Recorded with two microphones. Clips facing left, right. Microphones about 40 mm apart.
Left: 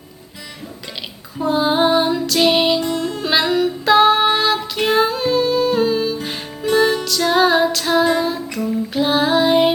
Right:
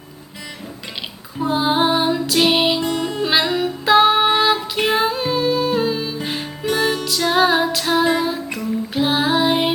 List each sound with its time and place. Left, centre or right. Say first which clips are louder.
1.4 s music: left 1 dB; centre
2.8 s music: even; right
3.2 s music: left 2 dB; centre